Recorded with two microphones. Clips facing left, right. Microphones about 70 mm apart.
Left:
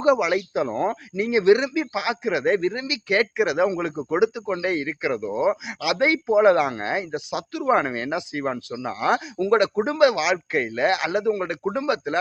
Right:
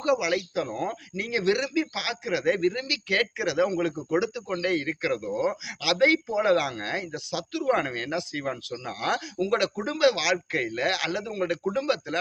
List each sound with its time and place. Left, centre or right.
0.0 s speech: left